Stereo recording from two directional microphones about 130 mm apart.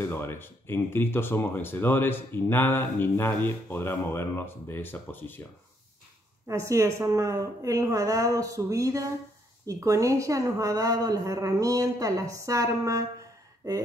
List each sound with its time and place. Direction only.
0.0 s speech: 15° left (ahead or behind)
6.4 s a man's voice: 25° right (ahead or behind)
13.6 s a sound: 30° right (ahead or behind)